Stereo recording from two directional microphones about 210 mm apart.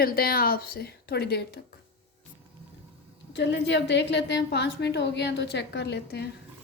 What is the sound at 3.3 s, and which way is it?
A woman's voice, 55° left (ahead or behind).